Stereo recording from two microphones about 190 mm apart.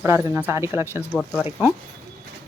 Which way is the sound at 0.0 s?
15° right (ahead or behind).